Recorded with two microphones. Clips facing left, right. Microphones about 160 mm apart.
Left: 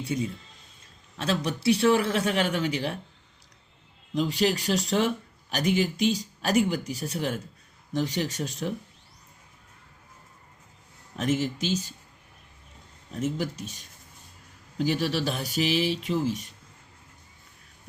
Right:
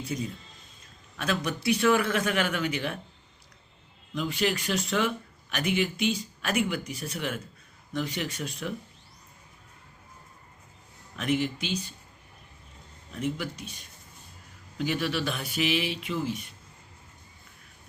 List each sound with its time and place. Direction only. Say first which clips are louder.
1.1 s speech: left 2 dB; 30° left (ahead or behind)
4.1 s speech: left 3 dB; 35° left (ahead or behind)
11.2 s speech: left 1 dB; 40° left (ahead or behind)
13.1 s speech: left 3 dB; 40° left (ahead or behind)